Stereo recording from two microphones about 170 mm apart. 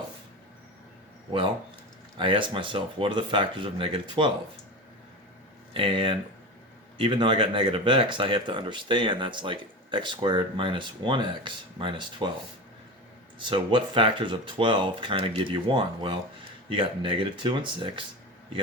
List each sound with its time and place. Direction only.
2.1 s speech: 30° right (ahead or behind)
5.7 s speech: 30° right (ahead or behind)
13.5 s speech: 30° right (ahead or behind)